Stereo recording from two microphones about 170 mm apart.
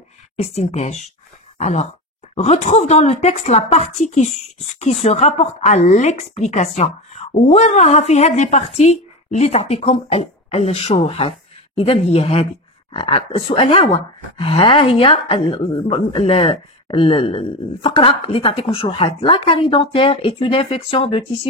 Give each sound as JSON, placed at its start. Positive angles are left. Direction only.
{"t": 0.4, "sound": "speech", "side_deg": 40}